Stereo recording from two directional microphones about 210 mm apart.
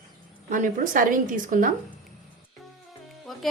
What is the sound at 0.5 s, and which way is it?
A woman's voice, 40° right (ahead or behind).